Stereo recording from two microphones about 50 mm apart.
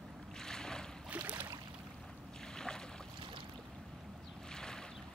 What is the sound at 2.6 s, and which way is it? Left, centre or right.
Boat, centre.